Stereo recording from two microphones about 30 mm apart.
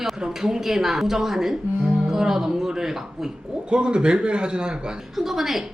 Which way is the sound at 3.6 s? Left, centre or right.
Right.